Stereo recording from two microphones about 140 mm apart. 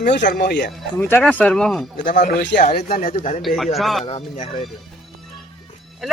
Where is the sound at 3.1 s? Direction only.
55° left (ahead or behind).